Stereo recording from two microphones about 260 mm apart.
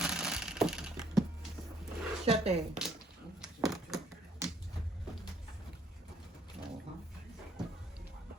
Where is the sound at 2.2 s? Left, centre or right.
Right.